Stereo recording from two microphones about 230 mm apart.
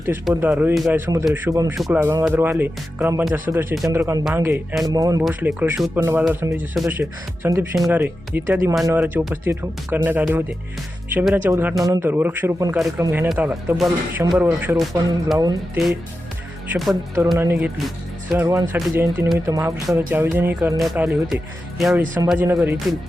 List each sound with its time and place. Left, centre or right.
0.0 s speech: centre
5.2 s speech: centre
16.7 s speech: centre
17.3 s speech: centre